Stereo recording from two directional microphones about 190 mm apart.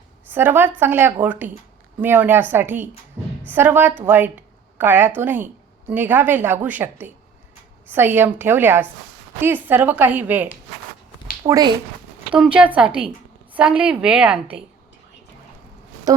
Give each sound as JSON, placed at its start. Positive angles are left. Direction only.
{"t": 0.3, "sound": "a woman's voice", "side_deg": -10}
{"t": 12.3, "sound": "a woman's voice", "side_deg": -5}
{"t": 16.1, "sound": "speech", "side_deg": -20}